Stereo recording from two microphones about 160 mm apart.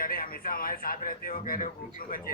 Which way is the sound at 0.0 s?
65° left (ahead or behind).